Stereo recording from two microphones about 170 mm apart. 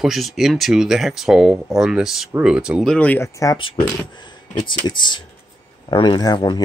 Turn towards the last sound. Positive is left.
turn(degrees=25)  # may be behind; listen again after turning